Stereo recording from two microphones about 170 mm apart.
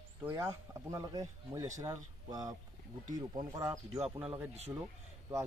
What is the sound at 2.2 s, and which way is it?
Speech, 20° right (ahead or behind).